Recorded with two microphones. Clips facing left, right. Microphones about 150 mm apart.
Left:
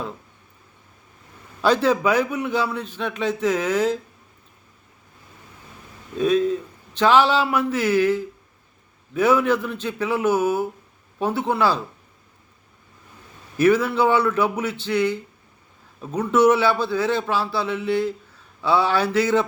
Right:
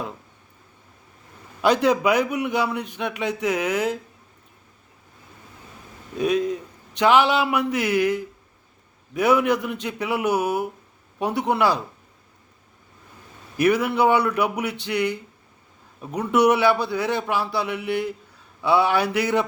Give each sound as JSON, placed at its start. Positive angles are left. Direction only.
{"t": 1.6, "sound": "a man's voice", "side_deg": -15}
{"t": 6.1, "sound": "a man's voice", "side_deg": -15}
{"t": 13.6, "sound": "a man's voice", "side_deg": -15}